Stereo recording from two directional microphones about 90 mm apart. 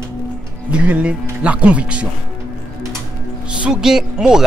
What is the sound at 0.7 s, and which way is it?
Speech, 15° right (ahead or behind).